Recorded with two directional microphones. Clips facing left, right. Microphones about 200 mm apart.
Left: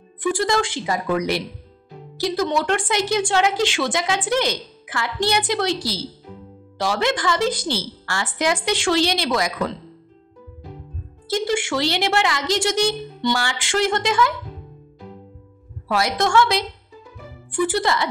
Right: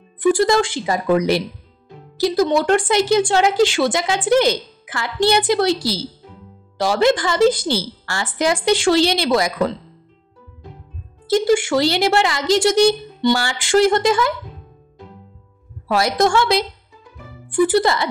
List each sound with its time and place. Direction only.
0.2 s speech: 35° right (ahead or behind)
11.2 s speech: 40° right (ahead or behind)
15.9 s speech: 35° right (ahead or behind)
17.6 s speech: 35° right (ahead or behind)